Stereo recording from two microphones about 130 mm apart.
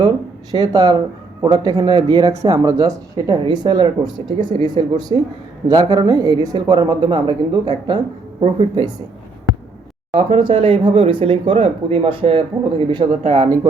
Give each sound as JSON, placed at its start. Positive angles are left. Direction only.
{"t": 0.5, "sound": "speech", "side_deg": -30}
{"t": 8.4, "sound": "speech", "side_deg": -45}
{"t": 10.2, "sound": "speech", "side_deg": -45}
{"t": 13.1, "sound": "speech", "side_deg": -60}